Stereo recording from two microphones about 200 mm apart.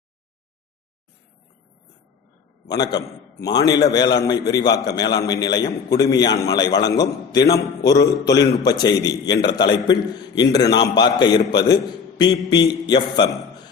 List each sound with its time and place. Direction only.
2.6 s a man's voice: 20° left (ahead or behind)
12.8 s a man's voice: 20° left (ahead or behind)